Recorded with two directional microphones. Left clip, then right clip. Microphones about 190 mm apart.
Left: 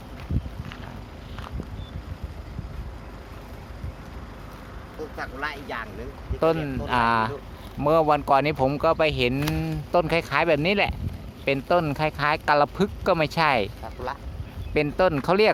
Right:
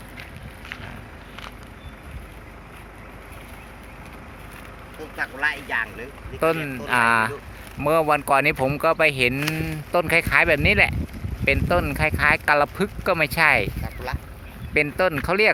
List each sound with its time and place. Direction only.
5.1 s speech: 55° left (ahead or behind)
6.4 s speech: 10° left (ahead or behind)
14.1 s duck: 45° left (ahead or behind)
14.7 s speech: 15° left (ahead or behind)